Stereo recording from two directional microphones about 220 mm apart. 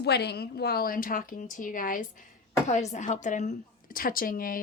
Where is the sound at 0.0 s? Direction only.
50° left (ahead or behind).